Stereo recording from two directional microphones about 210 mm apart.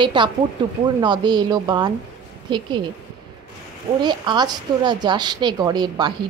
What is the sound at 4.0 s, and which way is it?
A woman's voice, 20° right (ahead or behind).